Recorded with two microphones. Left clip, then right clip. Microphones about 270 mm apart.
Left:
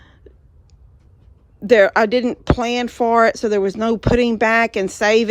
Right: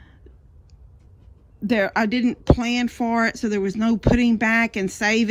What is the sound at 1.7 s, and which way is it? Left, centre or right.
Speech, left.